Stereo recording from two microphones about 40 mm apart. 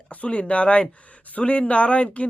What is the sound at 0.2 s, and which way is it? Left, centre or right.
Speech, left.